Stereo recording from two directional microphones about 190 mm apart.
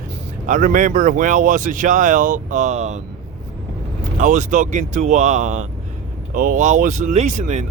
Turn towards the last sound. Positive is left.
turn(degrees=-40)  # may be behind; listen again after turning